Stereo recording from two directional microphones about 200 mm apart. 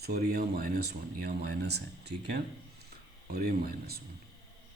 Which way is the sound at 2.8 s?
50° right (ahead or behind).